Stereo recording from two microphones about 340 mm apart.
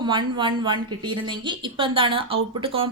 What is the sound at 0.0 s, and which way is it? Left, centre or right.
Speech, centre.